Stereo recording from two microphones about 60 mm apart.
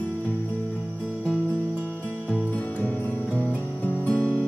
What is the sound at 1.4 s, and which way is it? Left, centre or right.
Music, right.